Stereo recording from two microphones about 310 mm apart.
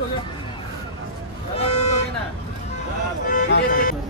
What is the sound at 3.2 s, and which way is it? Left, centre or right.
Music, left.